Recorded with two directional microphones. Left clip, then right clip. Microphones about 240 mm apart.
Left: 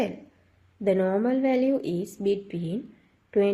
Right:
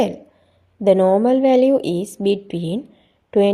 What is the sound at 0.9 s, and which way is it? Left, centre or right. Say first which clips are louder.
Speech: right 10 dB; right.